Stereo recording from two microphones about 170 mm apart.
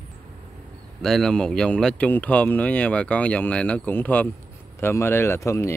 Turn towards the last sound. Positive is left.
turn(degrees=15)  # may be behind; listen again after turning